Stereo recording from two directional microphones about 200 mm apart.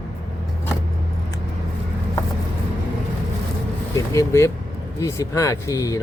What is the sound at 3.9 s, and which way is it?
Speech, 15° left (ahead or behind).